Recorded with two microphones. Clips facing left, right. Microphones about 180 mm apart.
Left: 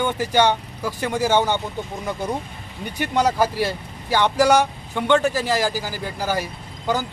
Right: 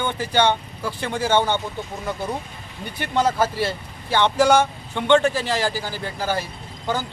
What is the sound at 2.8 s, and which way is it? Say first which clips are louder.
Speech: left 1 dB; 15° left (ahead or behind).